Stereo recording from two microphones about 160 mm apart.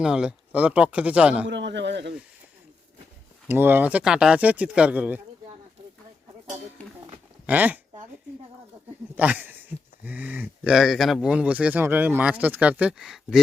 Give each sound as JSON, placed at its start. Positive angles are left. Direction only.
{"t": 0.0, "sound": "speech", "side_deg": -5}
{"t": 1.5, "sound": "speech", "side_deg": -90}
{"t": 3.5, "sound": "speech", "side_deg": -15}
{"t": 6.8, "sound": "speech", "side_deg": 10}
{"t": 7.4, "sound": "speech", "side_deg": -10}
{"t": 9.1, "sound": "speech", "side_deg": -10}